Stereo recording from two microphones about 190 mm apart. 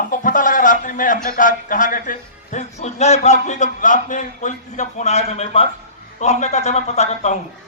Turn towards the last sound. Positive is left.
turn(degrees=35)  # may be behind; listen again after turning